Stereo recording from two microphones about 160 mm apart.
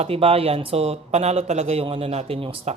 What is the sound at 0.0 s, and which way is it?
Speech, 40° right (ahead or behind).